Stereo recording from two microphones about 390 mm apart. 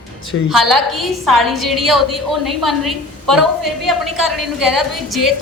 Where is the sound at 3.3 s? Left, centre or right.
Right.